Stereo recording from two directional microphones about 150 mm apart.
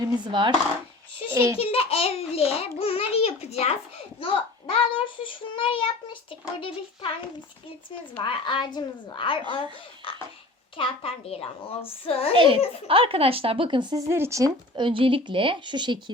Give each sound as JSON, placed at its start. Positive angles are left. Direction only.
{"t": 0.0, "sound": "speech", "side_deg": -30}
{"t": 1.3, "sound": "a child's voice", "side_deg": -15}
{"t": 1.5, "sound": "a child's voice", "side_deg": 40}
{"t": 8.2, "sound": "a child's voice", "side_deg": 30}
{"t": 10.0, "sound": "a sound", "side_deg": 35}
{"t": 10.8, "sound": "a child's voice", "side_deg": 40}
{"t": 12.3, "sound": "speech", "side_deg": -35}
{"t": 14.1, "sound": "speech", "side_deg": -20}
{"t": 14.8, "sound": "speech", "side_deg": -35}